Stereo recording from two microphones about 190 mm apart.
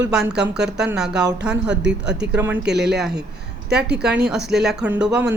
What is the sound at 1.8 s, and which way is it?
Speech, 65° right (ahead or behind).